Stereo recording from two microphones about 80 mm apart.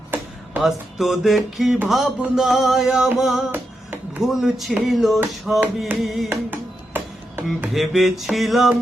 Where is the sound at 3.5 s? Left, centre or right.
Right.